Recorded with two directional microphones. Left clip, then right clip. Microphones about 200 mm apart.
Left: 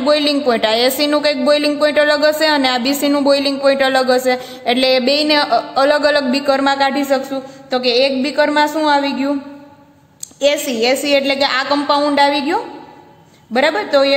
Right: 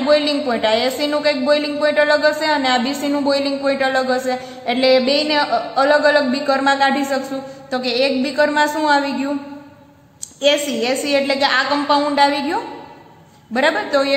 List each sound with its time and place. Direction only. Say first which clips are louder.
0.0 s speech: left 2 dB; 45° left (ahead or behind)
10.4 s a woman's voice: left 2 dB; 35° left (ahead or behind)